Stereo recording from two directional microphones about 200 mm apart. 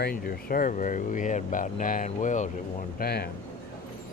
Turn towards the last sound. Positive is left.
turn(degrees=50)  # may be behind; listen again after turning